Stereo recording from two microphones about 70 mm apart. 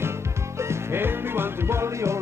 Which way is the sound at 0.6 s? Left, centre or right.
Right.